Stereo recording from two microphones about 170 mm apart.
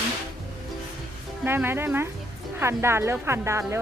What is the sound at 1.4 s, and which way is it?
A woman's voice, 15° right (ahead or behind).